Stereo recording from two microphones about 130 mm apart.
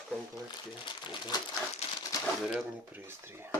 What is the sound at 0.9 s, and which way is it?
Speech, 35° left (ahead or behind).